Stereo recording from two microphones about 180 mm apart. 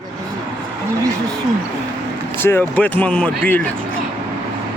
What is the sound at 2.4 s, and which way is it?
Speech, 10° left (ahead or behind).